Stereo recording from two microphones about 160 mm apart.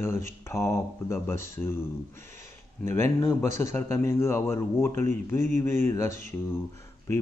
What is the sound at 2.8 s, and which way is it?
Speech, 15° left (ahead or behind).